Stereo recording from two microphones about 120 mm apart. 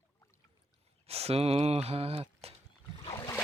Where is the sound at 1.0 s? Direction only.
60° right (ahead or behind).